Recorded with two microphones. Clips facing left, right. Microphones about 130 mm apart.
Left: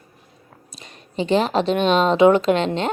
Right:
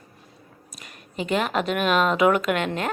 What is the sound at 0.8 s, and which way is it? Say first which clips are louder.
A woman's voice: left 6 dB; 30° left (ahead or behind).